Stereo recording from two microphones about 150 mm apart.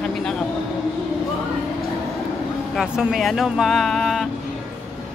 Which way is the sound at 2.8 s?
5° right (ahead or behind).